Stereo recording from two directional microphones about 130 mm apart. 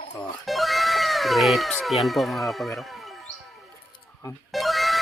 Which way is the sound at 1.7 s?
Centre (ahead or behind).